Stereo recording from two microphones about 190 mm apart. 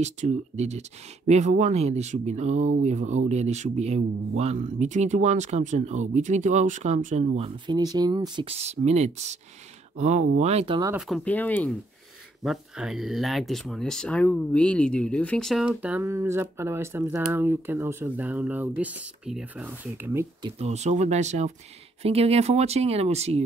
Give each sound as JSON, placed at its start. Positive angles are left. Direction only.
{"t": 0.0, "sound": "speech", "side_deg": -35}
{"t": 11.0, "sound": "speech", "side_deg": 0}
{"t": 12.4, "sound": "speech", "side_deg": 0}
{"t": 20.4, "sound": "speech", "side_deg": -35}